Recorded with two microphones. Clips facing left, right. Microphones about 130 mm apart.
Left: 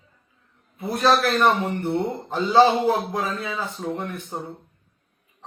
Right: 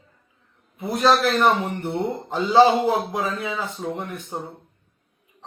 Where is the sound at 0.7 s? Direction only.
15° right (ahead or behind).